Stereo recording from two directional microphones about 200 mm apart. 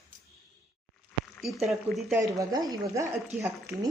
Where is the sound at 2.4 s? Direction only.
20° right (ahead or behind).